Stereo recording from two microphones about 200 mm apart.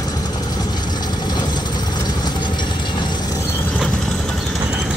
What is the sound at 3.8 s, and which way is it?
Vehicle, centre (ahead or behind).